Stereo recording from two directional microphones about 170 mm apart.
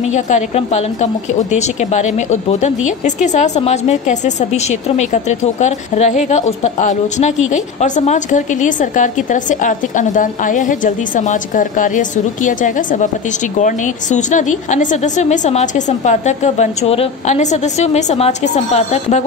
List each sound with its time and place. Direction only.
0.1 s a woman's voice: 40° left (ahead or behind)